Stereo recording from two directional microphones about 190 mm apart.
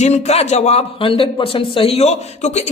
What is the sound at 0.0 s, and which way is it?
A man's voice, 35° left (ahead or behind).